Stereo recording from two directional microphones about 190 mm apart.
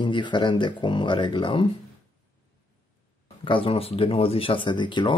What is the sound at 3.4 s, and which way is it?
Speech, 25° left (ahead or behind).